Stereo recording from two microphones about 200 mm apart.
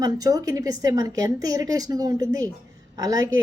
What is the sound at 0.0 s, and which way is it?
A woman's voice, 20° right (ahead or behind).